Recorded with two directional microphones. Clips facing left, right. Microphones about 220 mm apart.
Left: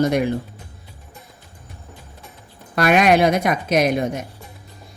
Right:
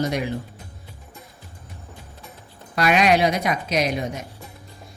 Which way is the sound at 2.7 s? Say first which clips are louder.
Left 3 dB; 50° left (ahead or behind).